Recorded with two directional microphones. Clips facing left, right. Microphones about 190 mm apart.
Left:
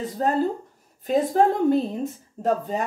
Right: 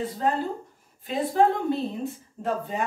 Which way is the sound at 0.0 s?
40° left (ahead or behind).